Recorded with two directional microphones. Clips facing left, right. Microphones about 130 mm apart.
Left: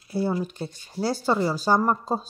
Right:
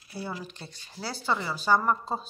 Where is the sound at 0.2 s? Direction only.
45° left (ahead or behind).